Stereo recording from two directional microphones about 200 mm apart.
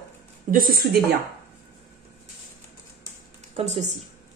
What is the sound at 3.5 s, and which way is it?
Speech, 35° right (ahead or behind).